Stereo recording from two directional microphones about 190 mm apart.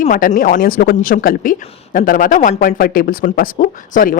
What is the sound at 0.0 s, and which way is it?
A woman's voice, 45° left (ahead or behind).